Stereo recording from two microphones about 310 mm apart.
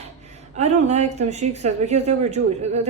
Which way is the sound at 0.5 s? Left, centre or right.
Right.